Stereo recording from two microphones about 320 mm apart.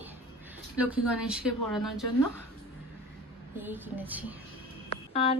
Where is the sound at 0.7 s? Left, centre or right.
Centre.